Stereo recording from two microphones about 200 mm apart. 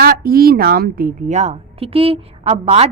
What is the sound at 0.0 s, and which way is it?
A woman's voice, 50° right (ahead or behind).